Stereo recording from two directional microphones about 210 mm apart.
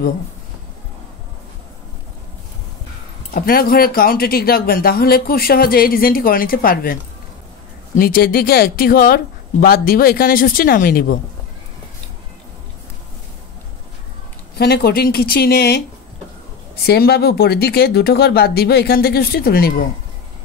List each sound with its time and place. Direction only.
3.3 s speech: 45° left (ahead or behind)
14.6 s speech: 50° left (ahead or behind)
16.8 s speech: 50° left (ahead or behind)